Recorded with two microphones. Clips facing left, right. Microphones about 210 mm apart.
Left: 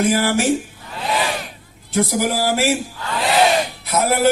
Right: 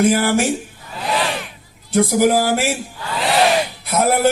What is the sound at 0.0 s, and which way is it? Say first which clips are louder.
Speech: right 2 dB; 50° right (ahead or behind).